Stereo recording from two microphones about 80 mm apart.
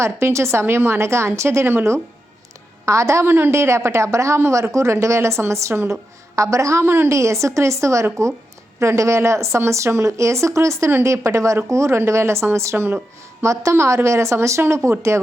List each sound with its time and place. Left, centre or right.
0.0 s a woman's voice: right
13.4 s a woman's voice: right